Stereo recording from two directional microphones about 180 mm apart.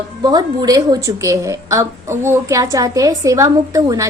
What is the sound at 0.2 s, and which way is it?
A woman's voice, 20° right (ahead or behind).